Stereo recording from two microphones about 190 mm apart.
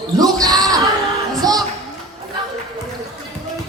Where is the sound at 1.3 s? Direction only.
20° right (ahead or behind).